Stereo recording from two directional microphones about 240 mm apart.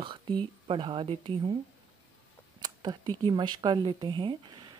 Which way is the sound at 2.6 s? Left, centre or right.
Centre.